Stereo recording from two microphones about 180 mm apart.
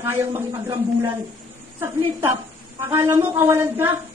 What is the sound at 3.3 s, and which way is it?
Speech, 15° right (ahead or behind).